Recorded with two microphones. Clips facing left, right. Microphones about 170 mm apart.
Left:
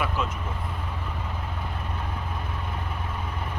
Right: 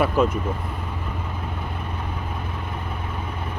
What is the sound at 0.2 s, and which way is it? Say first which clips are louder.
Speech: right 10 dB; 50° right (ahead or behind).